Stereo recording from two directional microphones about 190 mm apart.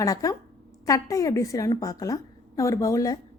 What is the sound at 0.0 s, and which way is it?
A woman's voice, 20° left (ahead or behind).